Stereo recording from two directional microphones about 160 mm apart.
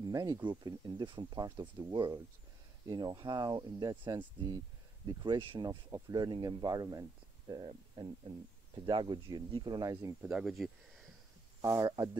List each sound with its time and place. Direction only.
0.0 s speech: 25° right (ahead or behind)
10.2 s speech: 5° right (ahead or behind)
11.6 s speech: 20° right (ahead or behind)